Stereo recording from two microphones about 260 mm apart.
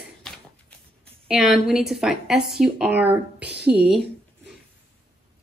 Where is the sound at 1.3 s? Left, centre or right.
Centre.